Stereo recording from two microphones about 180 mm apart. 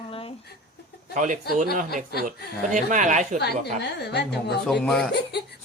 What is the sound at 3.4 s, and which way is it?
Speech, 65° left (ahead or behind).